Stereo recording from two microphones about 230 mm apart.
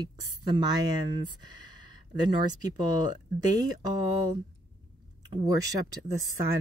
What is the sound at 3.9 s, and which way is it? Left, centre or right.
Speech, centre.